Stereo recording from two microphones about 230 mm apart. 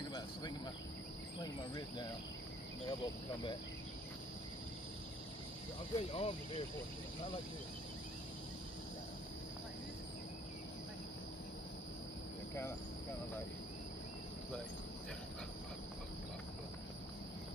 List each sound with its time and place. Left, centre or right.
1.4 s insect: centre
5.9 s speech: left